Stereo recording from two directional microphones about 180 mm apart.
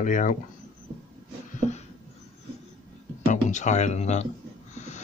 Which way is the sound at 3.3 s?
40° left (ahead or behind).